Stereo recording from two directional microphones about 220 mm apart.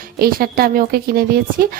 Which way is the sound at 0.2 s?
40° right (ahead or behind).